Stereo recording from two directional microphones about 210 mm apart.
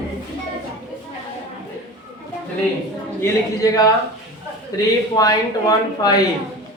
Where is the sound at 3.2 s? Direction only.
15° left (ahead or behind).